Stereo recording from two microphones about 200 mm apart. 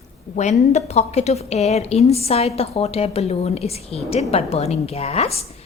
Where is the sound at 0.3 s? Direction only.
35° left (ahead or behind).